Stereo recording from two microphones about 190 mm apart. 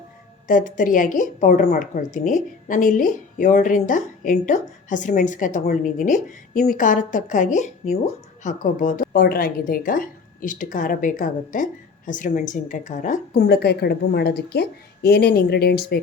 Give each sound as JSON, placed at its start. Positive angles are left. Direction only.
{"t": 0.4, "sound": "a woman's voice", "side_deg": 45}
{"t": 13.5, "sound": "a woman's voice", "side_deg": 60}